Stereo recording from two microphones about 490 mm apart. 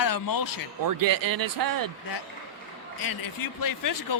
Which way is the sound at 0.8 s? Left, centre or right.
Right.